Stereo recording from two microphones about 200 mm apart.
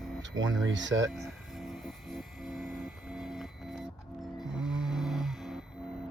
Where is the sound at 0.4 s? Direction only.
85° right.